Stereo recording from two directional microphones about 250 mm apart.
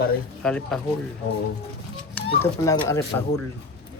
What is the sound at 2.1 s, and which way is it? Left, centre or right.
Speech, centre.